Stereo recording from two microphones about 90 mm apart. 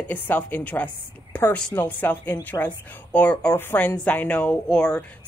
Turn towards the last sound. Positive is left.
turn(degrees=10)  # may be behind; listen again after turning